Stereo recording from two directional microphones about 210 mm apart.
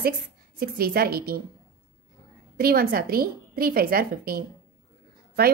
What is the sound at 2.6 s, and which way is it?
A woman's voice, 45° right (ahead or behind).